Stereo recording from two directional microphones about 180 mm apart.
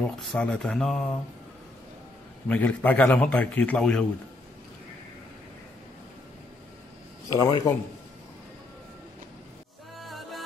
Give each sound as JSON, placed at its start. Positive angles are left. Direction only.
{"t": 0.0, "sound": "speech", "side_deg": 0}
{"t": 2.4, "sound": "a man's voice", "side_deg": 10}
{"t": 7.3, "sound": "a man's voice", "side_deg": 20}
{"t": 9.9, "sound": "music", "side_deg": 0}